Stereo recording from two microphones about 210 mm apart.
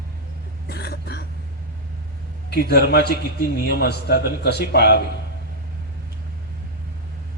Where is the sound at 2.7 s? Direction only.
50° left (ahead or behind).